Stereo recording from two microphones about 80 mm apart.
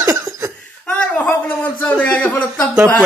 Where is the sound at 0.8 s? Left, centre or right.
Centre.